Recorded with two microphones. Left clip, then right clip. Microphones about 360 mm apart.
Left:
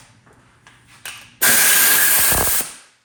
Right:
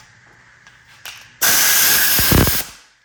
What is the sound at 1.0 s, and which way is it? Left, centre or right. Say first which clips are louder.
Spray: even; right.